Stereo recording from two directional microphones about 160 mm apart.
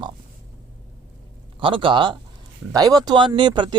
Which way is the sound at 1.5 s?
30° right (ahead or behind).